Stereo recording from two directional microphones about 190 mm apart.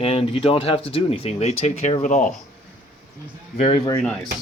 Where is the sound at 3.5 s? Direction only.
35° left (ahead or behind).